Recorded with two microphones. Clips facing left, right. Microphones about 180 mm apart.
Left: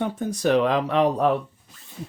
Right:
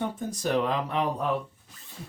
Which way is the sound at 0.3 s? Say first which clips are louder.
Left 7 dB; 70° left (ahead or behind).